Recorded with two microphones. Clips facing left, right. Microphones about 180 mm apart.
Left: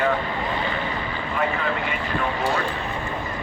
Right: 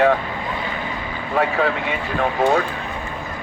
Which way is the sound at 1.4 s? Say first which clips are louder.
Right 6 dB; 85° right.